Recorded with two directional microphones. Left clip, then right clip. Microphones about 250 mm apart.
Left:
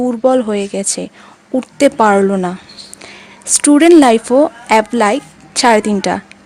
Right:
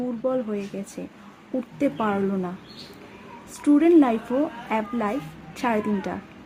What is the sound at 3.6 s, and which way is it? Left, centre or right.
Speech, left.